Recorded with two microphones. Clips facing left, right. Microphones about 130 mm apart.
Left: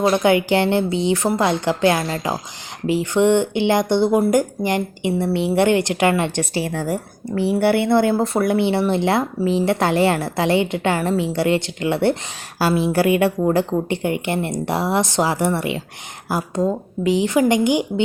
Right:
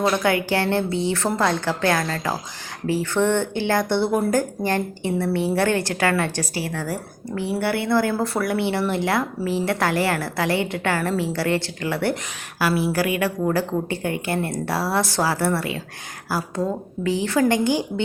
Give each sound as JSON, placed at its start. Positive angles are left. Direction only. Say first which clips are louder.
{"t": 0.0, "sound": "speech", "louder": "left 4 dB", "side_deg": 20}